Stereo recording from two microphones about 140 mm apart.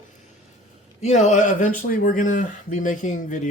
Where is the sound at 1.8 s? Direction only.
85° left; by 3.5 s 60° left (ahead or behind).